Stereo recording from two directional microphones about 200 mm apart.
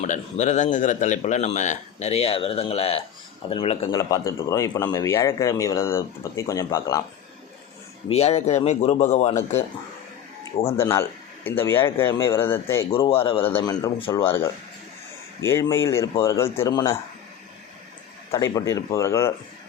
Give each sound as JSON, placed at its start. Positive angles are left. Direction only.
{"t": 0.0, "sound": "speech", "side_deg": 35}
{"t": 3.9, "sound": "speech", "side_deg": 15}
{"t": 8.1, "sound": "speech", "side_deg": 30}
{"t": 10.8, "sound": "speech", "side_deg": 15}
{"t": 13.1, "sound": "speech", "side_deg": 25}
{"t": 14.3, "sound": "speech", "side_deg": 10}
{"t": 18.5, "sound": "speech", "side_deg": 15}